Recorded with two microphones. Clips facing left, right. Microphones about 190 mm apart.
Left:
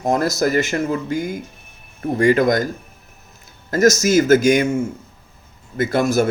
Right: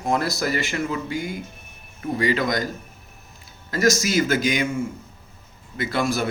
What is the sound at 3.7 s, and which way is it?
Speech, 45° left (ahead or behind).